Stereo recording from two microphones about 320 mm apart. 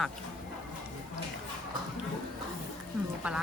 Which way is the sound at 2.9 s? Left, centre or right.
Centre.